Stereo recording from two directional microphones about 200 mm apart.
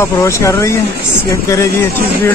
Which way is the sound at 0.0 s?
15° left (ahead or behind).